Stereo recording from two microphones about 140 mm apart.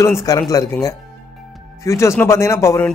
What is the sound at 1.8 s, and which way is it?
A man's voice, 20° left (ahead or behind).